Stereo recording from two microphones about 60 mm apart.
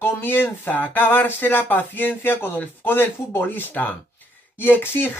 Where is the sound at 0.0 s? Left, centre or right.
Left.